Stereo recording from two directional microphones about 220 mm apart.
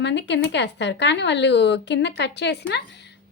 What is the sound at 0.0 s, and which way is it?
A woman's voice, 50° left (ahead or behind).